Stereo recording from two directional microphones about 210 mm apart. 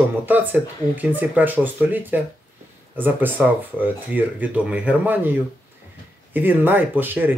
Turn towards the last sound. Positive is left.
turn(degrees=-10)  # may be behind; listen again after turning